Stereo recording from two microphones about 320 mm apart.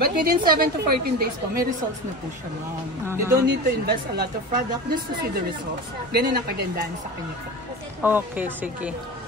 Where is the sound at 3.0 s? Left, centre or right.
Centre.